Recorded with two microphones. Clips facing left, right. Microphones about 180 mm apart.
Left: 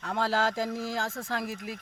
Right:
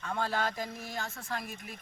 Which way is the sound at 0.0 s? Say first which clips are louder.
Left 4 dB; 80° left.